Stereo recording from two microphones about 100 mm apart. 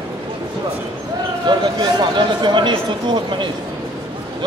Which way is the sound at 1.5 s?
50° right (ahead or behind).